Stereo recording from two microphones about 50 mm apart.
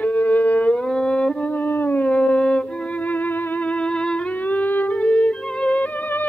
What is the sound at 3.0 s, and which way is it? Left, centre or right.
Music, left.